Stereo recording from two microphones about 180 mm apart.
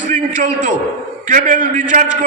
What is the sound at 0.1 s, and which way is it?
A man's voice, 45° right (ahead or behind).